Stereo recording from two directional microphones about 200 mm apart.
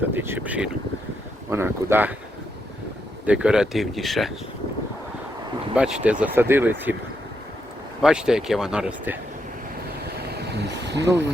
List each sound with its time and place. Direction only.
0.1 s speech: 10° right (ahead or behind)
3.2 s speech: 5° right (ahead or behind)
5.7 s speech: 5° right (ahead or behind)
8.0 s speech: 5° right (ahead or behind)
10.2 s vehicle: 55° right (ahead or behind)